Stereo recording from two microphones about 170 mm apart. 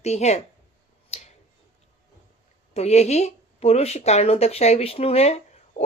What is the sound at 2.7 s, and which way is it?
Speech, 40° left (ahead or behind).